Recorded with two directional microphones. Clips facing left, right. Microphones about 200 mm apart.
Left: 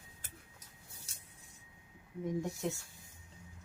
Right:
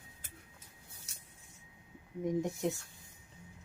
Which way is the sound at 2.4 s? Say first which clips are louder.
Right 3 dB; 15° right (ahead or behind).